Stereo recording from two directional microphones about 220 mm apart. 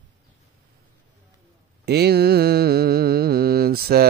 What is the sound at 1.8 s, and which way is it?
Mantra, 45° right (ahead or behind).